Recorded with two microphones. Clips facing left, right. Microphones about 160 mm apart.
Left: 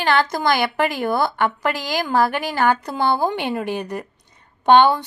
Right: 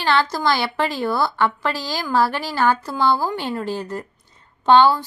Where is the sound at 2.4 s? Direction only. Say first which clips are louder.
Left 1 dB; 55° left (ahead or behind).